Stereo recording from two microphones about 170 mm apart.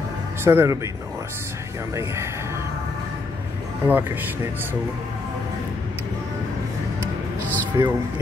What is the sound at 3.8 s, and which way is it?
Speech, 10° right (ahead or behind).